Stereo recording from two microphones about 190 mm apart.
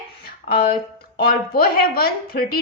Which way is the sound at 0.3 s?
50° left (ahead or behind).